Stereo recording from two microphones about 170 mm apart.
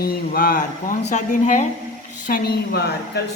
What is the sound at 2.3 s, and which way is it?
Speech, 65° left (ahead or behind).